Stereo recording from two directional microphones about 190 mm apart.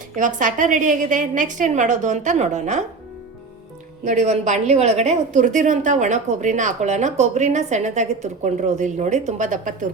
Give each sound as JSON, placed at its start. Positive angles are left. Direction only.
{"t": 0.2, "sound": "a woman's voice", "side_deg": -40}
{"t": 4.0, "sound": "a woman's voice", "side_deg": -40}